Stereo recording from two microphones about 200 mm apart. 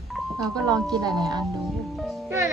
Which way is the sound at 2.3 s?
15° right (ahead or behind).